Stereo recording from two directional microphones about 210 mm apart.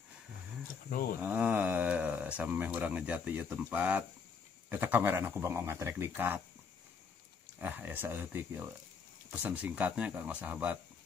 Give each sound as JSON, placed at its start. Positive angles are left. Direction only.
{"t": 0.8, "sound": "speech", "side_deg": 45}
{"t": 1.2, "sound": "speech", "side_deg": -10}
{"t": 7.6, "sound": "speech", "side_deg": -10}